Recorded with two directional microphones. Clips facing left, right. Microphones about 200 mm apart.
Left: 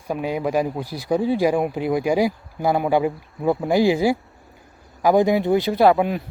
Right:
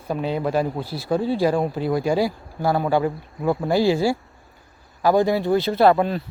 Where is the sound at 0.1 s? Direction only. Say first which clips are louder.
Even; 10° left (ahead or behind).